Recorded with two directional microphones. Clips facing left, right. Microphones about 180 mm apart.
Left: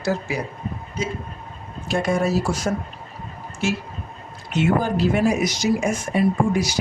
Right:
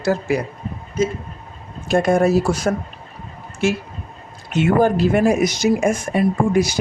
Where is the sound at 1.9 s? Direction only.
50° right (ahead or behind).